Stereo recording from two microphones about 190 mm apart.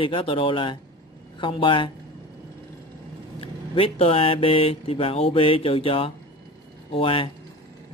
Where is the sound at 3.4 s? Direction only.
30° left (ahead or behind).